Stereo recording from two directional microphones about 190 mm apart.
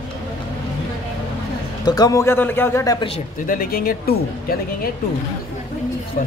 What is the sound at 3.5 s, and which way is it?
Speech, 50° left (ahead or behind).